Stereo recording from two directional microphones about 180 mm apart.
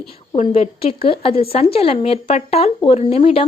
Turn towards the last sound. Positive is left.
turn(degrees=30)  # may be behind; listen again after turning